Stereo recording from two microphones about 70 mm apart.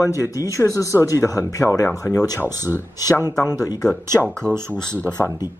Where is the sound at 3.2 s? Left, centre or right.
Left.